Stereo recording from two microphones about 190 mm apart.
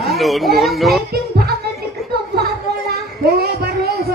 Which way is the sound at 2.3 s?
55° right (ahead or behind).